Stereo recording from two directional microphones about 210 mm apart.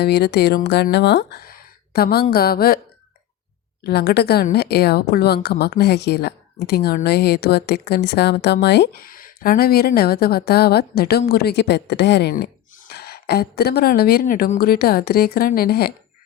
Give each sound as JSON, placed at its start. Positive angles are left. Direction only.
{"t": 0.0, "sound": "a woman's voice", "side_deg": 50}
{"t": 3.8, "sound": "a woman's voice", "side_deg": 50}